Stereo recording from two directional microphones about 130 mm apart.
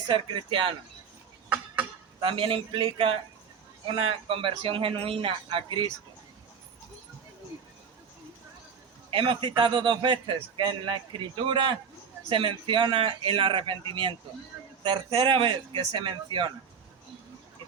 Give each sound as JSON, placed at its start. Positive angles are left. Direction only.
{"t": 0.1, "sound": "a man's voice", "side_deg": -40}
{"t": 1.5, "sound": "a sound", "side_deg": -10}
{"t": 2.2, "sound": "a man's voice", "side_deg": -40}
{"t": 9.0, "sound": "a man's voice", "side_deg": -40}